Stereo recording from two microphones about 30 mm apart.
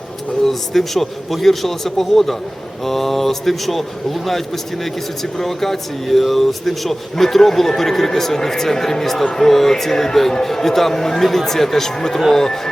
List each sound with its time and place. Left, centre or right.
0.4 s speech: centre